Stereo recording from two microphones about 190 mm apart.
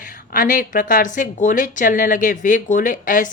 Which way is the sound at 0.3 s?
45° left (ahead or behind).